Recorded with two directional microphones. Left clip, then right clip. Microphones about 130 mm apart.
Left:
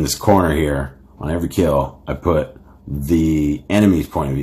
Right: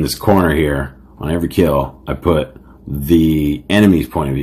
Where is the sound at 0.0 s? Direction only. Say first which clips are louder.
Right 1 dB; 5° right (ahead or behind).